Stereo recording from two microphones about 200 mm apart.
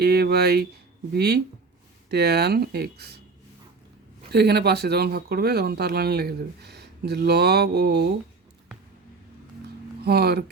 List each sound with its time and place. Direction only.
0.0 s speech: 50° right (ahead or behind)
4.3 s speech: 55° right (ahead or behind)
10.0 s speech: 55° right (ahead or behind)